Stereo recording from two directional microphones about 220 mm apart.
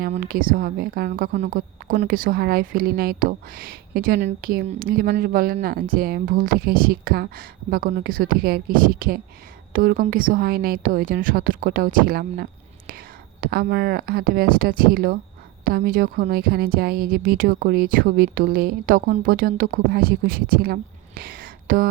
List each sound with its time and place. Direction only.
0.0 s speech: 40° right (ahead or behind)
21.2 s whispering: 40° right (ahead or behind)